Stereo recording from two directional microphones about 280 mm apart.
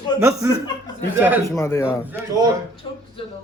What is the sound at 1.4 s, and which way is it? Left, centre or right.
Speech, centre.